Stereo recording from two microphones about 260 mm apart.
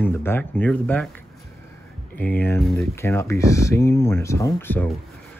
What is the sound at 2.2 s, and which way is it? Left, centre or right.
Speech, centre.